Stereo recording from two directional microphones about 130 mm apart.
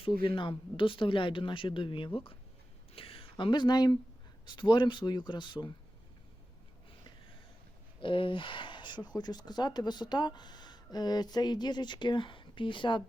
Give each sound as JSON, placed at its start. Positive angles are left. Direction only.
{"t": 0.0, "sound": "speech", "side_deg": 40}
{"t": 2.9, "sound": "a sound", "side_deg": 45}
{"t": 4.4, "sound": "speech", "side_deg": 35}
{"t": 8.0, "sound": "speech", "side_deg": 40}